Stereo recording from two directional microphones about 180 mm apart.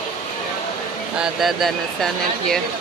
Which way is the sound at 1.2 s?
Centre (ahead or behind).